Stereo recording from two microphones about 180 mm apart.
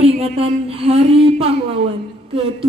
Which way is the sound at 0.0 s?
35° right (ahead or behind).